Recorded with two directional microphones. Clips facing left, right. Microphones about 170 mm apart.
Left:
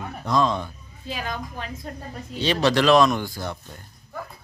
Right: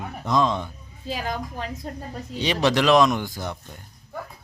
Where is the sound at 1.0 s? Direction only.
35° right (ahead or behind).